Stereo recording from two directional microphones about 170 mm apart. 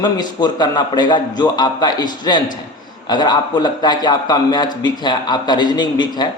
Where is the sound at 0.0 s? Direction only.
25° left (ahead or behind).